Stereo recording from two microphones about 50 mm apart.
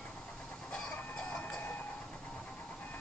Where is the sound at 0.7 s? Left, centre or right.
Left.